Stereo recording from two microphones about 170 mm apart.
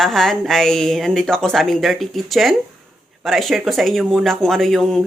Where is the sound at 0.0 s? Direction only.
Centre (ahead or behind).